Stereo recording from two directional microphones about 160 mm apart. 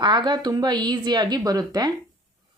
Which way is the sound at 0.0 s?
25° right (ahead or behind).